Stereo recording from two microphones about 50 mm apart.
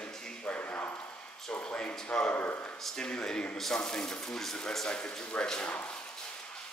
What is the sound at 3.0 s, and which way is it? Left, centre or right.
Speech, centre.